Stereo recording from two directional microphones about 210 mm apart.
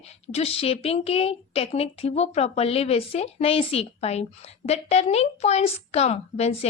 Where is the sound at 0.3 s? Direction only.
30° left (ahead or behind).